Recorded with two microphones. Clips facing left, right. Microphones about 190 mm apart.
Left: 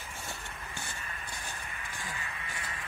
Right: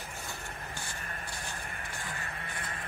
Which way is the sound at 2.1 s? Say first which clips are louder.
Right 1 dB; 50° right (ahead or behind).